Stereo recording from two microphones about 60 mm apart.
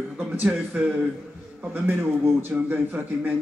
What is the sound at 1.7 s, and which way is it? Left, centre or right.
A man's voice, right.